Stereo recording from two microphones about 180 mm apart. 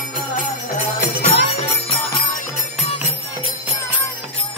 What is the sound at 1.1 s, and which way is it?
Music, 65° left (ahead or behind).